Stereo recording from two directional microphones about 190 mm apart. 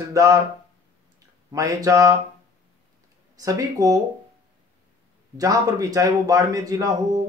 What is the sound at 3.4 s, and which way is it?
Speech, 20° right (ahead or behind).